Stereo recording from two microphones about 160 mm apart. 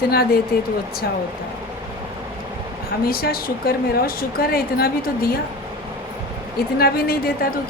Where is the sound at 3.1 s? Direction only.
70° left (ahead or behind).